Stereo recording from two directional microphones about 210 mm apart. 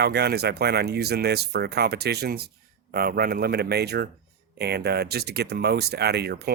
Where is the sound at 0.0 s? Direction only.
50° right (ahead or behind).